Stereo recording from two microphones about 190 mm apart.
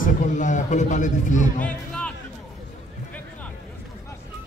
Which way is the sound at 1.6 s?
5° left (ahead or behind).